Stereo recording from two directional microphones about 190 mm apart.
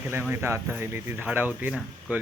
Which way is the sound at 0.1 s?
10° right (ahead or behind).